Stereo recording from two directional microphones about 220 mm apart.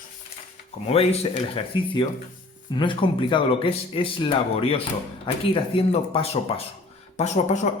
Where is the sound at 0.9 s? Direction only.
25° left (ahead or behind).